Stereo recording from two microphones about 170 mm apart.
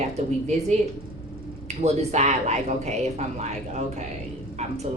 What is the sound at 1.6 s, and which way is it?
Speech, 40° right (ahead or behind).